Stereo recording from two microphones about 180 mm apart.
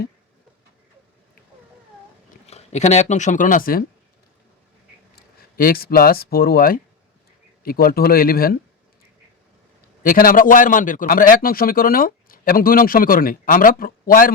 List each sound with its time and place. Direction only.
2.5 s speech: 35° left (ahead or behind)
5.1 s speech: 55° left (ahead or behind)
10.0 s a man's voice: 50° left (ahead or behind)